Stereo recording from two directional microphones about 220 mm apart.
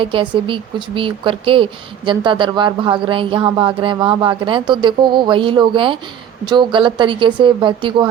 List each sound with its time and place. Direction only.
0.0 s speech: 25° right (ahead or behind)